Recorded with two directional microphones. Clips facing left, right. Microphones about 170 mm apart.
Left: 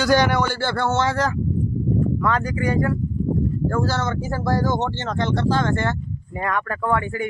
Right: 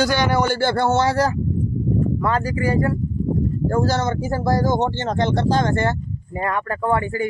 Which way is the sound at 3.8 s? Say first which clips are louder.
Right 3 dB; 15° right (ahead or behind).